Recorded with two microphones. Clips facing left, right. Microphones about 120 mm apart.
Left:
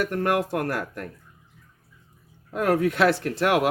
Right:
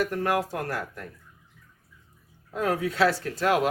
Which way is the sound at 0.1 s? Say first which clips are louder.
Left 3 dB; 60° left (ahead or behind).